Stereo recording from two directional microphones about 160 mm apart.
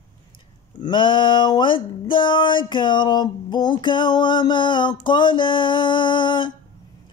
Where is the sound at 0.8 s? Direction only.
30° left (ahead or behind).